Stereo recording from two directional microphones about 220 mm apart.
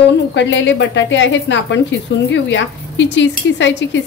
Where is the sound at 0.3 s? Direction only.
55° left (ahead or behind).